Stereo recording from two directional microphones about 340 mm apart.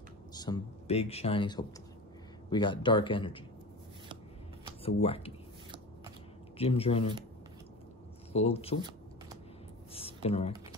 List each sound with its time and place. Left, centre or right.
0.3 s speech: centre
4.8 s speech: centre
6.6 s speech: centre
8.3 s speech: centre
9.9 s computer keyboard: centre